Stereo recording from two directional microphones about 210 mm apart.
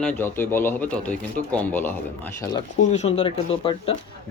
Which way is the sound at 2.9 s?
30° left (ahead or behind).